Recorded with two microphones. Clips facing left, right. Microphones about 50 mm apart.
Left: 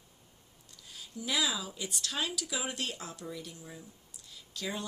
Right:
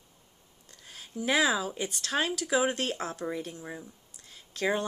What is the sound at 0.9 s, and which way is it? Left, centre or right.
A woman's voice, right.